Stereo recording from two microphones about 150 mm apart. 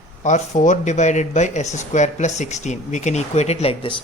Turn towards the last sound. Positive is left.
turn(degrees=40)  # may be behind; listen again after turning